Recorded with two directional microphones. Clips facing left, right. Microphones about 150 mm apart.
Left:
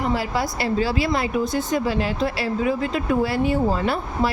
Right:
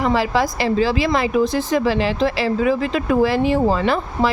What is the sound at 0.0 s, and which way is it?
Speech, 90° right.